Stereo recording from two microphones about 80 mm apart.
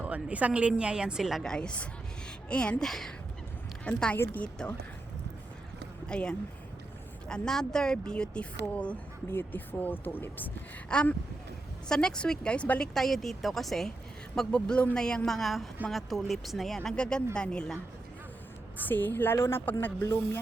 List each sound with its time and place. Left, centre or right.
0.0 s a woman's voice: centre
1.4 s speech: centre
3.8 s speech: centre
6.1 s speech: centre
9.3 s speech: left
10.8 s speech: centre
12.9 s speech: centre
18.8 s speech: left